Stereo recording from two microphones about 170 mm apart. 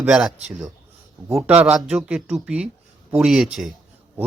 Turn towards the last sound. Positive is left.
turn(degrees=-5)  # may be behind; listen again after turning